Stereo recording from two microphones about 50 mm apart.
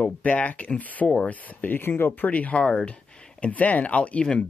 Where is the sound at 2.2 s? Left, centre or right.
Left.